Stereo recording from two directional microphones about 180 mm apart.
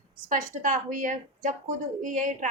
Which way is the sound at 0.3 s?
45° right (ahead or behind).